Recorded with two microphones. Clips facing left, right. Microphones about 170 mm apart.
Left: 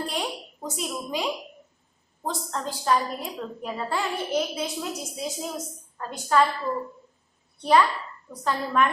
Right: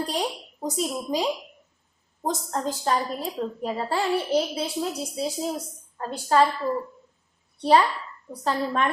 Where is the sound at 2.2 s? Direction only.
40° right (ahead or behind).